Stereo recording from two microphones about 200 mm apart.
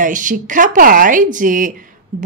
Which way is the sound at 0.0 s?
40° right (ahead or behind).